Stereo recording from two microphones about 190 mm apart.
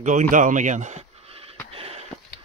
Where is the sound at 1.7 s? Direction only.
30° right (ahead or behind).